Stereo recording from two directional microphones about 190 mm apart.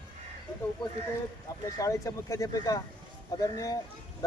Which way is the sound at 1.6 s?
15° left (ahead or behind).